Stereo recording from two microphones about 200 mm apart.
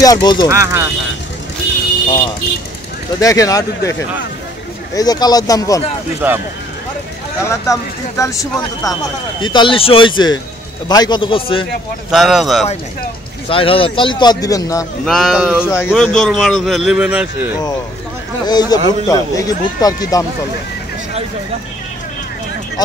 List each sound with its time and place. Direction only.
0.0 s a man's voice: 20° left (ahead or behind)
0.5 s speech: 15° right (ahead or behind)
3.2 s speech: 15° left (ahead or behind)
4.9 s a man's voice: 20° left (ahead or behind)
6.2 s speech: 10° right (ahead or behind)
7.4 s a man's voice: 15° left (ahead or behind)
12.1 s a man's voice: centre (ahead or behind)
13.5 s a man's voice: 25° left (ahead or behind)
15.0 s a man's voice: centre (ahead or behind)
15.6 s a man's voice: 10° left (ahead or behind); by 17.5 s 5° right (ahead or behind)
18.5 s a man's voice: 20° left (ahead or behind)